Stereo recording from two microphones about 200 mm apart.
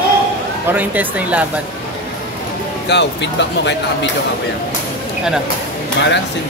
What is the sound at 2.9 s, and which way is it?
Speech, 60° left (ahead or behind).